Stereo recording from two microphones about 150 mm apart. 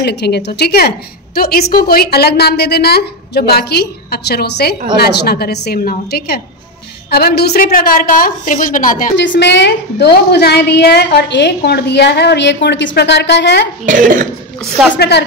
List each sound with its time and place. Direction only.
0.0 s a woman's voice: 90° left; by 9.1 s 65° left (ahead or behind)
9.4 s a woman's voice: 90° left
13.8 s speech: 65° right (ahead or behind)